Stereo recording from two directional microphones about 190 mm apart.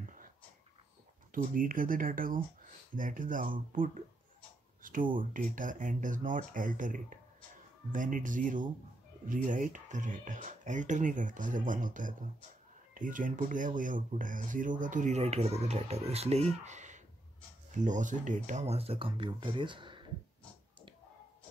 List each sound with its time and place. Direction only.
0.0 s whispering: 45° right (ahead or behind)
1.3 s speech: 45° right (ahead or behind)
5.1 s speech: 45° right (ahead or behind)
16.6 s a sound: 40° right (ahead or behind)
17.6 s speech: 40° right (ahead or behind); by 20.1 s 25° right (ahead or behind)